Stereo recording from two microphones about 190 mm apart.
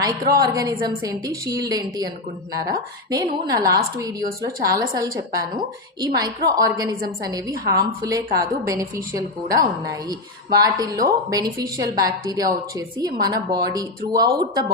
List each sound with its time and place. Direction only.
0.0 s a woman's voice: 20° right (ahead or behind)